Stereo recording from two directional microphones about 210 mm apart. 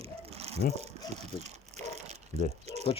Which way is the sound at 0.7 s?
30° right (ahead or behind).